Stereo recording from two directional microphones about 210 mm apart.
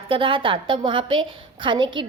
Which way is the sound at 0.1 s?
25° right (ahead or behind).